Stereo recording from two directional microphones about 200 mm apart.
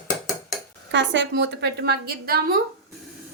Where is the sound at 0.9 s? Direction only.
65° right (ahead or behind).